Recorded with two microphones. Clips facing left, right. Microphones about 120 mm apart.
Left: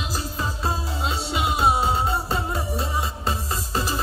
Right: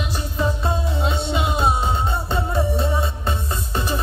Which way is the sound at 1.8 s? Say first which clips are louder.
Even; 30° left (ahead or behind).